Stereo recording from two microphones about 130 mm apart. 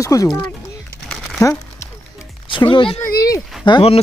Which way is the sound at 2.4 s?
40° left (ahead or behind).